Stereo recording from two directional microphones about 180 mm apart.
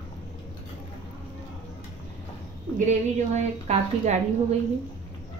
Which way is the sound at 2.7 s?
40° right (ahead or behind).